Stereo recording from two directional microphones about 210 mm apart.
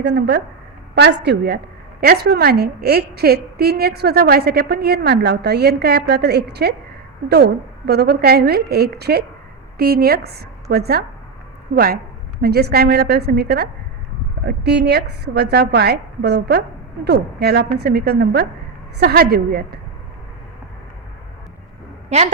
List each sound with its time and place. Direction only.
0.0 s a woman's voice: 55° right (ahead or behind)
22.1 s a woman's voice: 35° right (ahead or behind)